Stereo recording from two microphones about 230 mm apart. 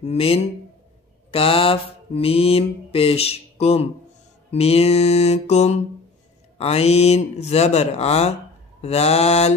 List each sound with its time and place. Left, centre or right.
0.0 s mantra: left